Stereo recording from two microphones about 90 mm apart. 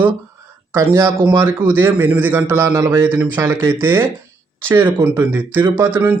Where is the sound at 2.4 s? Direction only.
35° right (ahead or behind).